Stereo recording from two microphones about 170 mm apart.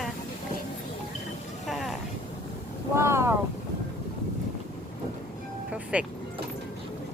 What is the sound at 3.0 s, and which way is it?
Speech, 15° right (ahead or behind).